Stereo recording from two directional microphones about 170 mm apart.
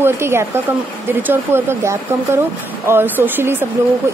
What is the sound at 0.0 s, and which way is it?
Speech, 15° right (ahead or behind).